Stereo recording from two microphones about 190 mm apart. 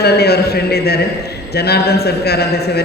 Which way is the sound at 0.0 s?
55° left (ahead or behind).